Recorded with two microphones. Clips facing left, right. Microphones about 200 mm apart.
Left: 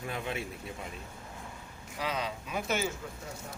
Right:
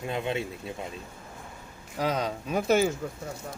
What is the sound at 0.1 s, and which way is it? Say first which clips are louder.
Speech: right 7 dB; 25° right (ahead or behind).